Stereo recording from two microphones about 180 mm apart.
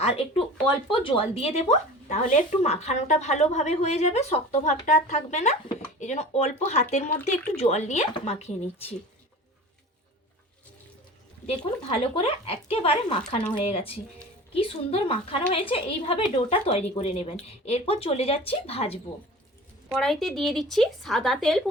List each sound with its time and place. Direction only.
0.0 s speech: 30° left (ahead or behind)
11.4 s speech: 35° left (ahead or behind)
20.0 s speech: centre (ahead or behind)